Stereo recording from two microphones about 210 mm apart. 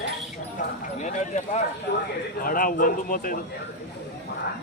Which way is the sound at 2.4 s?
40° left (ahead or behind).